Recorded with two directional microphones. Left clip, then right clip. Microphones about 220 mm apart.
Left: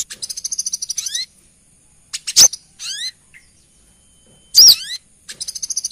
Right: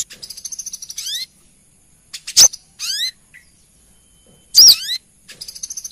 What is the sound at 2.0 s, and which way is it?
Mouse, 25° left (ahead or behind).